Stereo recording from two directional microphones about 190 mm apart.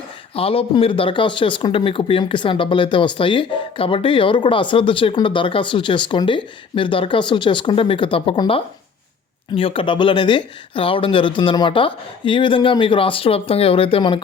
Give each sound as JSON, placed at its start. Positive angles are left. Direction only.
{"t": 0.3, "sound": "speech", "side_deg": 30}